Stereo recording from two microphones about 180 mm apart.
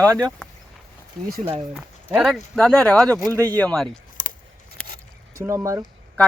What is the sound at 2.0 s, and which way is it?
Speech, 5° right (ahead or behind).